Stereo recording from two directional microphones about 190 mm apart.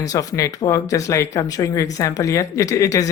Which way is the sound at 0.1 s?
20° left (ahead or behind).